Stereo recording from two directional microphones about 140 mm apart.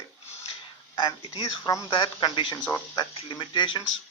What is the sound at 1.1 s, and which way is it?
Speech, 30° left (ahead or behind).